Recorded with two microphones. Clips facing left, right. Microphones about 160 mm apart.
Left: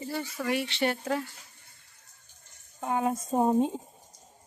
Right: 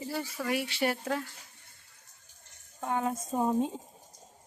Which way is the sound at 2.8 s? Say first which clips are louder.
Left 3 dB; 10° left (ahead or behind).